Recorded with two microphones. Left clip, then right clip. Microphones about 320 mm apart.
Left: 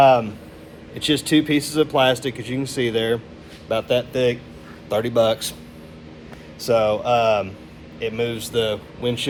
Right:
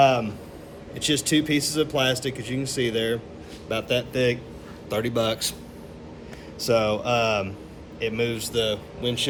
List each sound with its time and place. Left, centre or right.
0.0 s speech: centre
6.6 s speech: centre
8.5 s speech: centre